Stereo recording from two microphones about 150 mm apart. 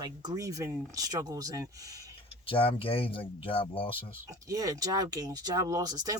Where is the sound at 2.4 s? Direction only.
35° left (ahead or behind).